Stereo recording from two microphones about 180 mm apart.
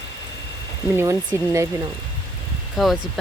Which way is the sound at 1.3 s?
15° right (ahead or behind).